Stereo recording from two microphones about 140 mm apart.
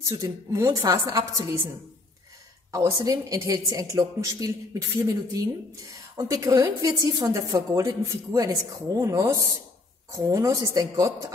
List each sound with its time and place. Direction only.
0.0 s a woman's voice: 20° right (ahead or behind)
2.7 s a woman's voice: 25° right (ahead or behind)